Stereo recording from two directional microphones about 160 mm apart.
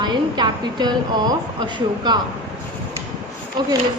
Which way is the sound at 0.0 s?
25° right (ahead or behind).